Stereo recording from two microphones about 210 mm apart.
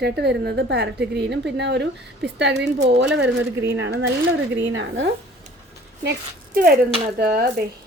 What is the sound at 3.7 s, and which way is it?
Speech, 60° right (ahead or behind).